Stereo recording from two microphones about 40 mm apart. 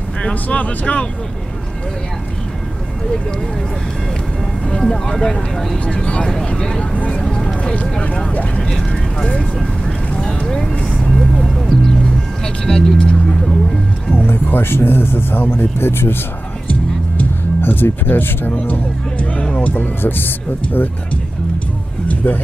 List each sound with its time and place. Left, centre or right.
0.3 s speech: left
4.9 s speech: centre
5.9 s speech: left
6.2 s speech: centre
6.8 s speech: left
7.2 s a sound: left
8.3 s speech: left
10.1 s vehicle: centre
12.6 s speech: centre
14.1 s speech: left
17.6 s speech: left
18.5 s speech: left
20.0 s speech: left
22.0 s vehicle: left